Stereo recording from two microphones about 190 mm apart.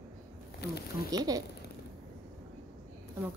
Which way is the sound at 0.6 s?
65° left (ahead or behind).